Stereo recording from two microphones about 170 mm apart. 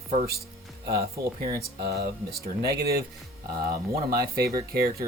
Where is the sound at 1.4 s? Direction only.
60° right (ahead or behind).